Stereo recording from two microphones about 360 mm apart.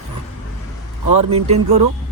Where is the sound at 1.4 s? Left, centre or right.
Centre.